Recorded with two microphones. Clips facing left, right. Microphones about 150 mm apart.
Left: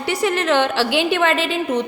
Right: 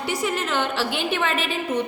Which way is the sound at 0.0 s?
75° left (ahead or behind).